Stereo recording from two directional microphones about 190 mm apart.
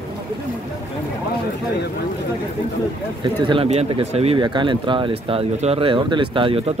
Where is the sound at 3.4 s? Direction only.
30° right (ahead or behind).